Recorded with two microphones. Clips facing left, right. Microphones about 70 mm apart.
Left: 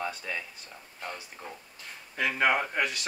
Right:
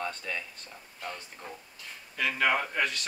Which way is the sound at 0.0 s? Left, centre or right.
Centre.